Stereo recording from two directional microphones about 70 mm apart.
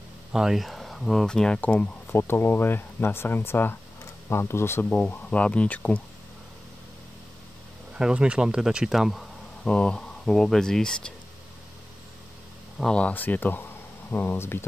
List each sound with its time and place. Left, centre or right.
0.3 s speech: centre
2.1 s speech: left
5.3 s speech: centre
7.9 s speech: centre
9.8 s speech: centre
12.9 s speech: left